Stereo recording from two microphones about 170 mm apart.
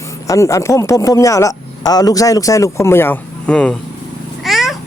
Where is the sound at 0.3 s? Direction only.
20° left (ahead or behind).